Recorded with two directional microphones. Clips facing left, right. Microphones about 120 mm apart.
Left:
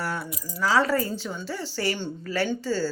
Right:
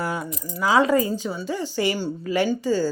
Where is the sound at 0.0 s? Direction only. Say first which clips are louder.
Right 3 dB; 15° right (ahead or behind).